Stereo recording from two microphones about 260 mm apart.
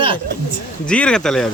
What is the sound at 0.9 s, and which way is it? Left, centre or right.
Speech, centre.